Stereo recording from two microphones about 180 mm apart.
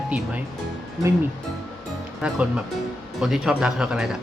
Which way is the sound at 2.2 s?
5° right (ahead or behind).